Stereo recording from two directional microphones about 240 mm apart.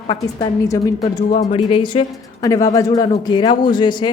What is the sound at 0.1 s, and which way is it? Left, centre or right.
A woman's voice, centre.